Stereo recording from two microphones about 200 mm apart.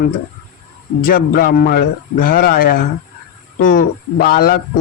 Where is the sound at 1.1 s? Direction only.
45° left (ahead or behind).